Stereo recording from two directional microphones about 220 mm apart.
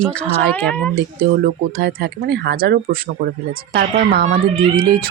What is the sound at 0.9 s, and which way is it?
Speech, 45° right (ahead or behind).